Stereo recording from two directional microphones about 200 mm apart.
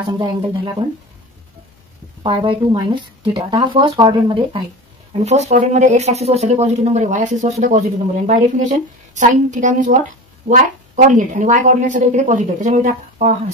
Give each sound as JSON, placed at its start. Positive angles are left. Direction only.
{"t": 0.2, "sound": "speech", "side_deg": -20}
{"t": 2.2, "sound": "a woman's voice", "side_deg": -25}